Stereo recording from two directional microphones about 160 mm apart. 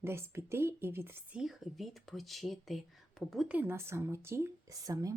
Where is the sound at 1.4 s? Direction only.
Centre (ahead or behind).